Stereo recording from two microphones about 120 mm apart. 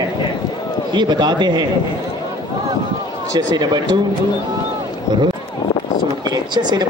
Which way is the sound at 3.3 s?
35° right (ahead or behind).